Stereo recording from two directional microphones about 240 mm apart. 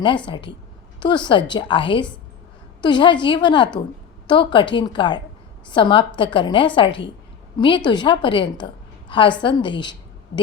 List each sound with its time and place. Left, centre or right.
0.3 s a woman's voice: left